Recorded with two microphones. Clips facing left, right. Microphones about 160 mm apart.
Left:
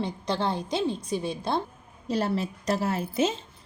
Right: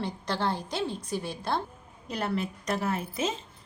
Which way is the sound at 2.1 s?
30° left (ahead or behind).